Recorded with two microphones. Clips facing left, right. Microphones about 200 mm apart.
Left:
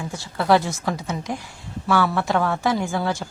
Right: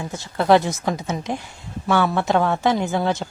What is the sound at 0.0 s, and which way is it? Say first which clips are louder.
A woman's voice: right 2 dB; 20° right (ahead or behind).